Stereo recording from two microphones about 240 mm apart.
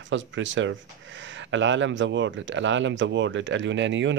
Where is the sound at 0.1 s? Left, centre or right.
Right.